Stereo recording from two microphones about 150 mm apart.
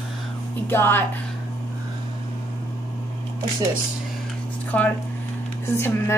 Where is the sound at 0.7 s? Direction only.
15° left (ahead or behind).